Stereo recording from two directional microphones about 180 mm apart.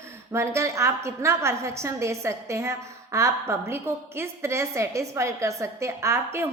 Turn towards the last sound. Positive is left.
turn(degrees=-15)  # may be behind; listen again after turning